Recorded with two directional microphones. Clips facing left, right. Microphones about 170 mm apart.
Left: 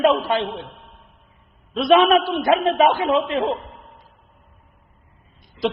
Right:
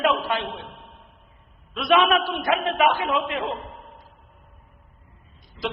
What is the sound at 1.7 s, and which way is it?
A woman's voice, 30° left (ahead or behind).